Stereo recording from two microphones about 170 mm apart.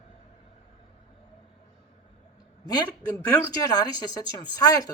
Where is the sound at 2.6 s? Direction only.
20° left (ahead or behind).